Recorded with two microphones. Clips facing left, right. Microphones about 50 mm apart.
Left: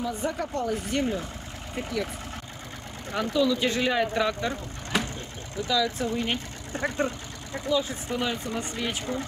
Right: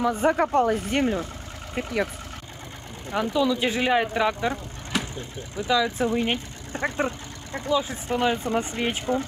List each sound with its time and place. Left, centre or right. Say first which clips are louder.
0.1 s speech: right 9 dB; right
3.1 s speech: right 1 dB; centre
5.6 s speech: right 3 dB; right